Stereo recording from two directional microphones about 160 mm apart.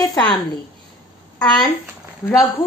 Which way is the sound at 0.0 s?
25° left (ahead or behind).